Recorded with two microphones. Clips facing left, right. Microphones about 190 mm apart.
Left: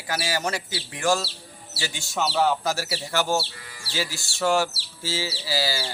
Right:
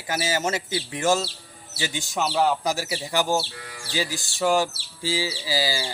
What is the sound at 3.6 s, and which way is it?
Sheep, 60° right (ahead or behind).